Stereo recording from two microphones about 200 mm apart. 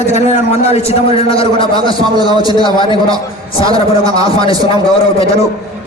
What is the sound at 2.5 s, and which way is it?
Speech, 25° left (ahead or behind).